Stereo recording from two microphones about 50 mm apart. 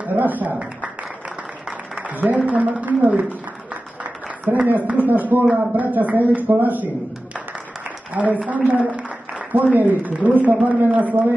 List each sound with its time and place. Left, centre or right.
0.0 s a sound: right
2.0 s a man's voice: right
8.1 s a woman's voice: right